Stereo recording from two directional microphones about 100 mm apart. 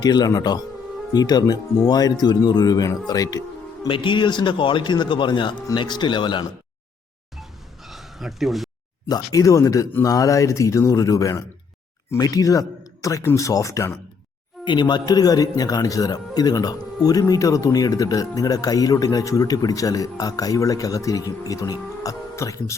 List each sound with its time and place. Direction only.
0.0 s speech: 40° left (ahead or behind)
3.8 s a man's voice: 55° left (ahead or behind)
7.9 s a sound: centre (ahead or behind)
9.0 s speech: 40° left (ahead or behind)
14.6 s speech: 50° left (ahead or behind); by 22.7 s 30° left (ahead or behind)